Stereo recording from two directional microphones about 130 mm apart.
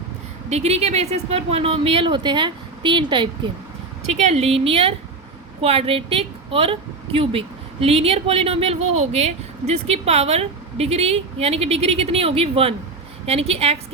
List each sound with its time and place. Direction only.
0.5 s a woman's voice: 55° right (ahead or behind); by 3.5 s 40° right (ahead or behind)
4.1 s a woman's voice: 60° right (ahead or behind)